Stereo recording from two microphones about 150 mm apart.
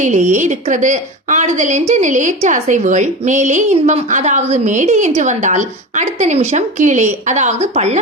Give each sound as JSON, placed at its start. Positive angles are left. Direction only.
{"t": 0.0, "sound": "a woman's voice", "side_deg": -55}